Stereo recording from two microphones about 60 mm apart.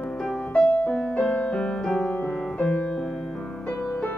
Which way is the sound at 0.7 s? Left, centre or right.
Left.